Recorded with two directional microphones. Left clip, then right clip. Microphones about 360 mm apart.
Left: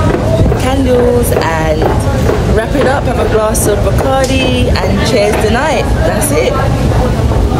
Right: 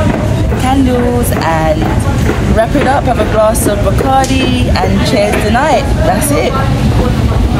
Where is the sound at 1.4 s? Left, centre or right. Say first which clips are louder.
Even; centre.